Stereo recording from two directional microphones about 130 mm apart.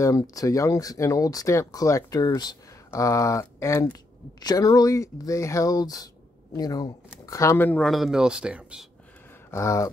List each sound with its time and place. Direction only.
0.0 s speech: 25° left (ahead or behind)
7.8 s speech: centre (ahead or behind)
9.5 s speech: 25° left (ahead or behind)